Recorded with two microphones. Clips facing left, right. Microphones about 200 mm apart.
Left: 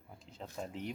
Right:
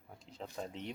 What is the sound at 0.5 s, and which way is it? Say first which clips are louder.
Speech: left 2 dB; 5° left (ahead or behind).